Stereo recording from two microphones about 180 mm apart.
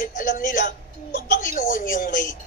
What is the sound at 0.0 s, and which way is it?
A man's voice, 45° left (ahead or behind).